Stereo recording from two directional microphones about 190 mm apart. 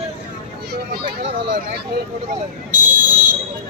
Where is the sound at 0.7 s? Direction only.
55° right (ahead or behind).